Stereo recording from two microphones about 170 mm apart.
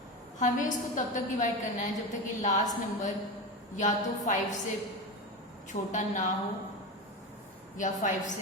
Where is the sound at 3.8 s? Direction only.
45° left (ahead or behind).